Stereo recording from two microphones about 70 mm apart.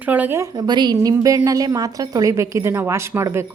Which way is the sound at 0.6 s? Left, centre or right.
Right.